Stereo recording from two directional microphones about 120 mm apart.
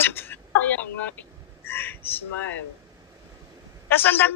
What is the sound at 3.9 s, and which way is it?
Speech, 15° left (ahead or behind).